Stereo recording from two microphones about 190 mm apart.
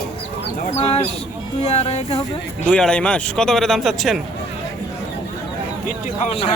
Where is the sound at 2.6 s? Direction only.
5° left (ahead or behind).